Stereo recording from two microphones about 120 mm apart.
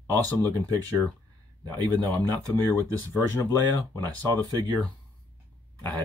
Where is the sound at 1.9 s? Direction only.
15° left (ahead or behind).